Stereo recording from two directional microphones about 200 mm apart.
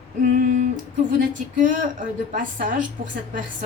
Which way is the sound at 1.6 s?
40° right (ahead or behind).